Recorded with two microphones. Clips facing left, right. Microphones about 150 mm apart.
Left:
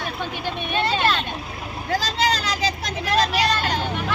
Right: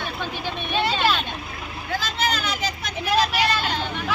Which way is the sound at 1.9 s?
35° left (ahead or behind).